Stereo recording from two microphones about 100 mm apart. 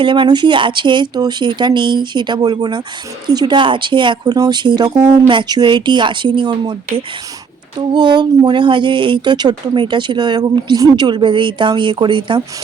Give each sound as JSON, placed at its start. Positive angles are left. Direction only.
{"t": 0.0, "sound": "speech", "side_deg": -55}